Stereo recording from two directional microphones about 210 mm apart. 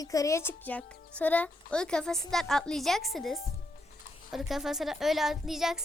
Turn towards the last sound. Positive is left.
turn(degrees=0)  # may be behind; listen again after turning